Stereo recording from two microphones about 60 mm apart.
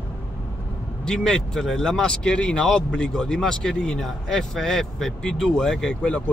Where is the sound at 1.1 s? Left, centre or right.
Centre.